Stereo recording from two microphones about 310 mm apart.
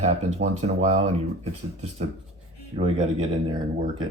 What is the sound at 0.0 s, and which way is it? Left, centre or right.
Speech, right.